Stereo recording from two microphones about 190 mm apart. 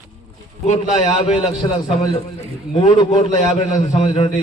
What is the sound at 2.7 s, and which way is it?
A man's voice, 25° left (ahead or behind).